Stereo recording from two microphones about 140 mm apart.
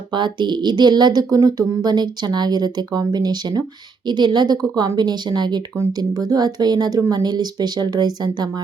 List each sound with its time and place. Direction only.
0.1 s speech: 35° right (ahead or behind)